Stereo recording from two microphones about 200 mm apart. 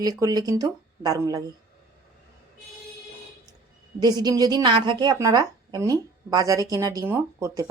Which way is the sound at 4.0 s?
20° right (ahead or behind).